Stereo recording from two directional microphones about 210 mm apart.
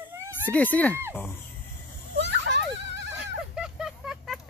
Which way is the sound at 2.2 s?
55° right (ahead or behind).